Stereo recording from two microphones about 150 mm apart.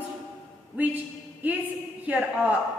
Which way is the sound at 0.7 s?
10° right (ahead or behind).